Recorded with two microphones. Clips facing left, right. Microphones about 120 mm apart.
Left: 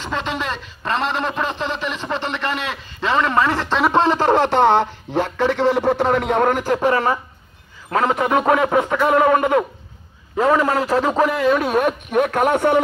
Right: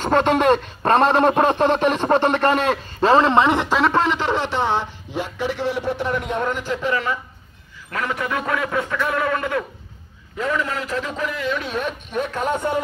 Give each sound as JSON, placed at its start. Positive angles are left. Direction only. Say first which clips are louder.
{"t": 0.0, "sound": "a man's voice", "louder": "right 8 dB", "side_deg": -50}
{"t": 4.1, "sound": "speech", "louder": "left 6 dB", "side_deg": 45}
{"t": 7.9, "sound": "a man's voice", "louder": "left 7 dB", "side_deg": 30}
{"t": 10.4, "sound": "a man's voice", "louder": "left 7 dB", "side_deg": 40}